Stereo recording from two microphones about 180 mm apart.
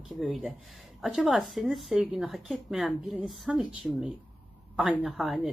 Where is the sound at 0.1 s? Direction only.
Centre (ahead or behind).